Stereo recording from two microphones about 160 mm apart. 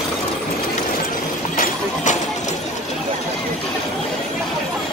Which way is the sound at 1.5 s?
60° left (ahead or behind).